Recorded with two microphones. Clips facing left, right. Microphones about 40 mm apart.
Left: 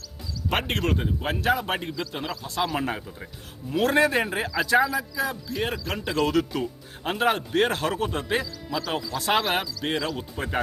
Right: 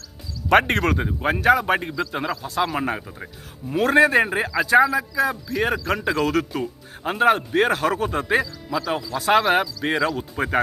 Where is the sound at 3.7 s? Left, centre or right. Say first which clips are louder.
Right 5 dB; right.